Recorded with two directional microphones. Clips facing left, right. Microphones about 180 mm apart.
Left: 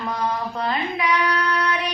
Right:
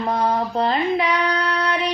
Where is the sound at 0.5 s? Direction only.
30° right (ahead or behind).